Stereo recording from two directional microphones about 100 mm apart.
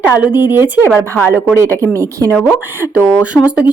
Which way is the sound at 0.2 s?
20° right (ahead or behind).